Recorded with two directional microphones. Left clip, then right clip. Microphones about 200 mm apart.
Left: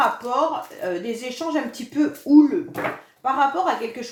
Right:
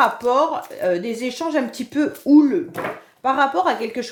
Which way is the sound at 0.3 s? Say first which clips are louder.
Right 4 dB; 45° right (ahead or behind).